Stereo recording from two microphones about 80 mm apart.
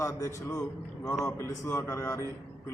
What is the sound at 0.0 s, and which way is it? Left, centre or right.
A man's voice, left.